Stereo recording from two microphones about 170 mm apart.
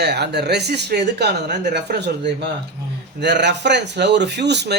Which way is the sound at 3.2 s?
85° right.